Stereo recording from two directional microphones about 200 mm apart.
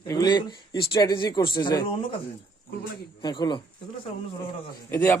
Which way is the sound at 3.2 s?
20° left (ahead or behind).